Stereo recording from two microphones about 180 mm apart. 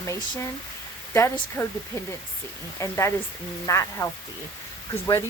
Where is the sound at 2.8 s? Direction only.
15° left (ahead or behind).